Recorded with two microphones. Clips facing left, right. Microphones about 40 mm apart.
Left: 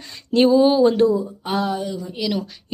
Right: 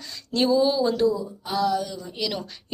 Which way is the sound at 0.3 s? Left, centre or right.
Left.